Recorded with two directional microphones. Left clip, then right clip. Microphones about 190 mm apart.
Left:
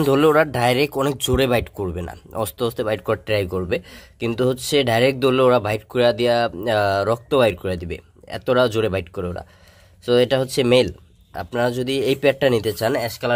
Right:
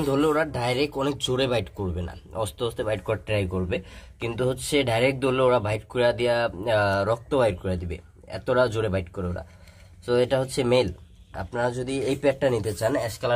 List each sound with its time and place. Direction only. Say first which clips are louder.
0.0 s speech: left 7 dB; 50° left (ahead or behind)